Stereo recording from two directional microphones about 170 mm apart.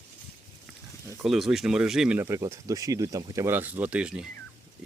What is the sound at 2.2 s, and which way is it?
Speech, 15° right (ahead or behind).